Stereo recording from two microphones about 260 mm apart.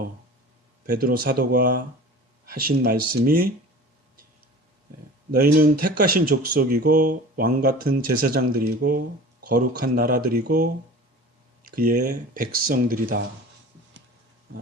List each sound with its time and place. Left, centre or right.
0.9 s speech: right
5.4 s speech: right
11.8 s speech: right